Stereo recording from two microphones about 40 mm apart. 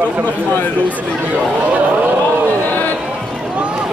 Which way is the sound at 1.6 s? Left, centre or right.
Right.